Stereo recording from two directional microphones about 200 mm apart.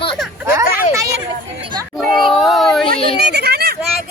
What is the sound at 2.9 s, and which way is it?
Speech, 30° left (ahead or behind).